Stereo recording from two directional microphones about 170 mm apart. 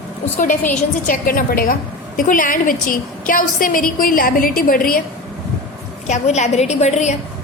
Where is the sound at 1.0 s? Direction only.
55° left (ahead or behind).